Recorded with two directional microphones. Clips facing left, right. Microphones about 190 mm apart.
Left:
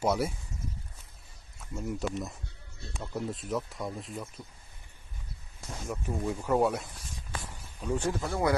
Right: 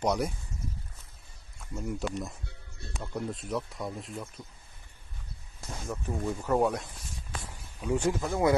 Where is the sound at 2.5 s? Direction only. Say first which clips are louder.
Right 1 dB; 55° right (ahead or behind).